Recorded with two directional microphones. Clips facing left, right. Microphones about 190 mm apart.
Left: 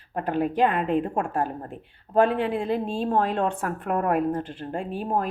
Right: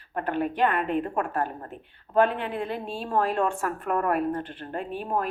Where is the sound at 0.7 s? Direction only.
25° left (ahead or behind).